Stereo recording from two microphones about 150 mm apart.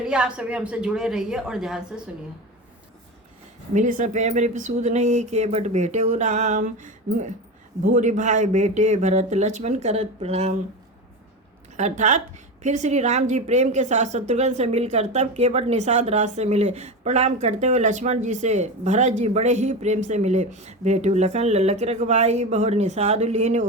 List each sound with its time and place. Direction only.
0.0 s a woman's voice: 5° right (ahead or behind)
3.8 s a woman's voice: 55° right (ahead or behind)
11.8 s a woman's voice: 55° right (ahead or behind)